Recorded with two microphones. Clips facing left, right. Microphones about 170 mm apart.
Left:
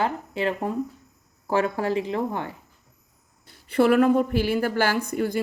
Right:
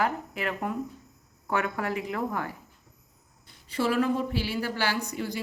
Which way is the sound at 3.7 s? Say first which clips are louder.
Left 8 dB; 60° left (ahead or behind).